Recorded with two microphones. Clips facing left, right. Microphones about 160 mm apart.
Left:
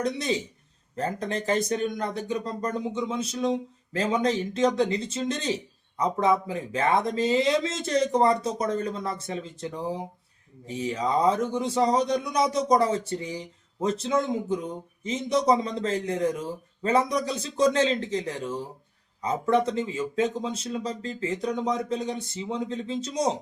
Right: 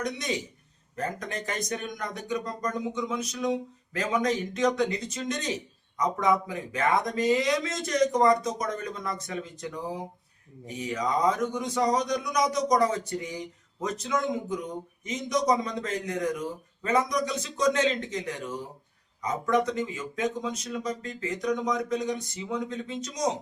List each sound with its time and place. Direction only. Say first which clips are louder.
0.0 s a man's voice: left 4 dB; 30° left (ahead or behind)